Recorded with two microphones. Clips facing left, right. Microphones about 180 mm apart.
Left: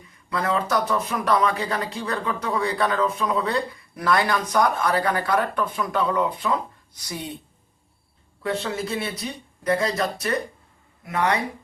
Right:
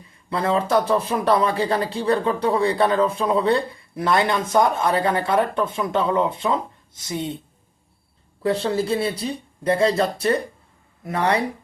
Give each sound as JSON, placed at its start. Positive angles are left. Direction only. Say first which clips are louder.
{"t": 0.3, "sound": "speech", "louder": "right 3 dB", "side_deg": -30}
{"t": 8.4, "sound": "speech", "louder": "right 6 dB", "side_deg": -35}